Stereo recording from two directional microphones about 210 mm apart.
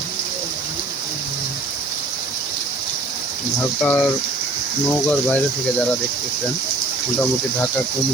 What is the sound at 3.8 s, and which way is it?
Speech, 5° left (ahead or behind).